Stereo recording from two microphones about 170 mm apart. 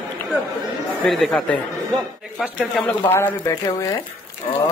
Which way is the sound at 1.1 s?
5° left (ahead or behind).